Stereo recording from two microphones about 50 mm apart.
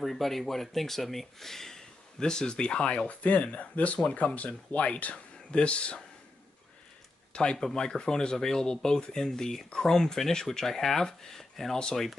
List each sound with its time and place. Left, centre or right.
0.0 s speech: centre; by 6.0 s left
7.5 s speech: centre